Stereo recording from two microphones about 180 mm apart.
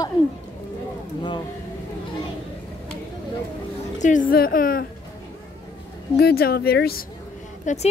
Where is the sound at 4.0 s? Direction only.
45° left (ahead or behind).